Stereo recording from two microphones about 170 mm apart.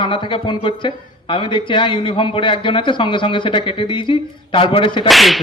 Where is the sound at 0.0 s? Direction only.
30° left (ahead or behind).